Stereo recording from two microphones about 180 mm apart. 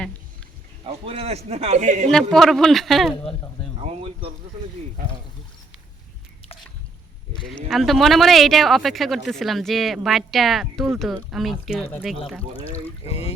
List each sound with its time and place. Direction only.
0.9 s a man's voice: 30° right (ahead or behind)
2.3 s speech: centre (ahead or behind)
7.7 s speech: centre (ahead or behind)
11.8 s speech: 10° left (ahead or behind)
13.1 s speech: 35° left (ahead or behind)